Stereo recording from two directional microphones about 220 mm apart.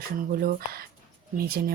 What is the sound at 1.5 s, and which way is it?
Speech, 45° right (ahead or behind).